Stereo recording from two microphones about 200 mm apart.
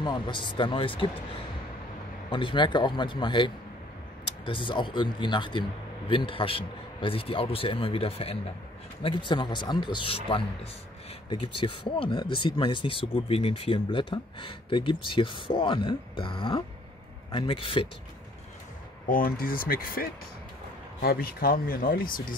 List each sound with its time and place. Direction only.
0.0 s speech: 20° left (ahead or behind)
2.2 s speech: 25° left (ahead or behind)
19.0 s speech: 45° left (ahead or behind)